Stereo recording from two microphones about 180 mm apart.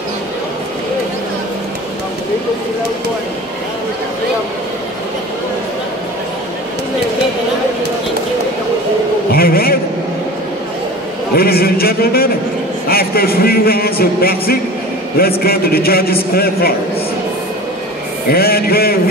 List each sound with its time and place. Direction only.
9.3 s a man's voice: 55° left (ahead or behind)
11.3 s a man's voice: 60° left (ahead or behind)
18.3 s a man's voice: 60° left (ahead or behind)